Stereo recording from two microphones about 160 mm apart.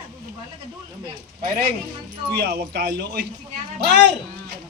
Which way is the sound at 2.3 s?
90° right.